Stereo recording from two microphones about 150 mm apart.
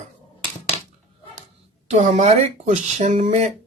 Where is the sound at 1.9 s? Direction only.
50° right (ahead or behind).